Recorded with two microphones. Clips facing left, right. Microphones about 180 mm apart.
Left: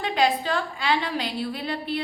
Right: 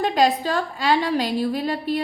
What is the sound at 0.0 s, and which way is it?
A woman's voice, 40° right (ahead or behind).